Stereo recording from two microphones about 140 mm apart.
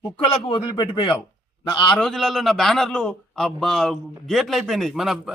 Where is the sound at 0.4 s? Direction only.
35° left (ahead or behind).